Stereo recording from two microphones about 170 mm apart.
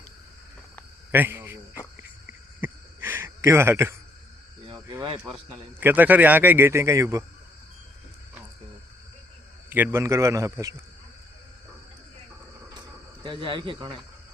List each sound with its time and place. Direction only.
1.1 s cricket: 10° right (ahead or behind)
2.6 s a sound: 10° right (ahead or behind)
4.7 s cricket: 20° right (ahead or behind)
5.8 s a man's voice: 10° right (ahead or behind)
9.6 s a man's voice: 10° right (ahead or behind)
13.2 s speech: 30° right (ahead or behind)